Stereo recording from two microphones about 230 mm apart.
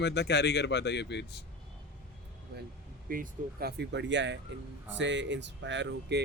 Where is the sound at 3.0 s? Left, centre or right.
Right.